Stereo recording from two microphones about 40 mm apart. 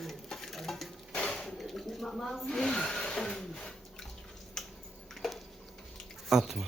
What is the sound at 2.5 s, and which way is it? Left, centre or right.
Speech, centre.